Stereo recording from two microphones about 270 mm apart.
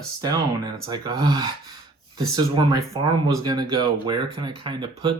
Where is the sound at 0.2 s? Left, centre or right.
Centre.